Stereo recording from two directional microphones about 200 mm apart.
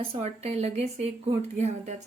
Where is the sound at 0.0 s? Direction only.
30° right (ahead or behind).